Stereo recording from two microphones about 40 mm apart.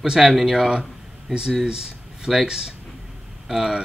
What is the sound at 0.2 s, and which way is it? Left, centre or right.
Speech, centre.